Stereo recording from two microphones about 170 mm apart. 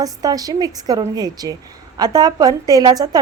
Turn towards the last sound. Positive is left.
turn(degrees=-25)  # may be behind; listen again after turning